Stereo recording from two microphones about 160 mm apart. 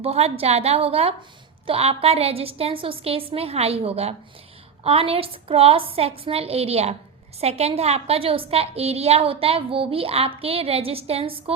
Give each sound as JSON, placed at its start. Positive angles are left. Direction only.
{"t": 0.0, "sound": "a woman's voice", "side_deg": -40}